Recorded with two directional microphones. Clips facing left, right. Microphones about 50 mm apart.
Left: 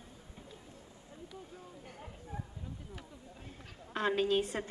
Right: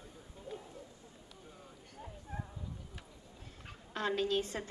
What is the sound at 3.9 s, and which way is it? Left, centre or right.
Speech, centre.